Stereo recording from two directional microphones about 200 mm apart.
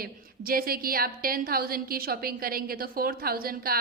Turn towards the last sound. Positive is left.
turn(degrees=-50)  # may be behind; listen again after turning